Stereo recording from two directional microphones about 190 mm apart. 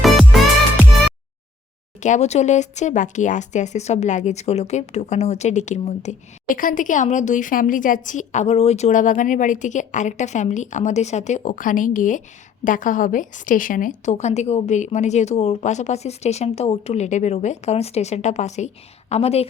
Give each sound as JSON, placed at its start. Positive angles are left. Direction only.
{"t": 0.0, "sound": "music", "side_deg": 0}
{"t": 2.0, "sound": "speech", "side_deg": 40}